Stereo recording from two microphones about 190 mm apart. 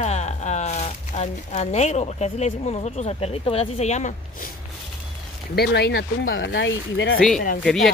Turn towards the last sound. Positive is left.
turn(degrees=0)  # may be behind; listen again after turning